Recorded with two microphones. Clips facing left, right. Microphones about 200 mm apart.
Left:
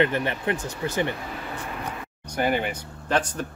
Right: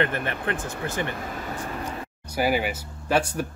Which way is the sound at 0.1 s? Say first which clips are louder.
Left 2 dB; 55° right (ahead or behind).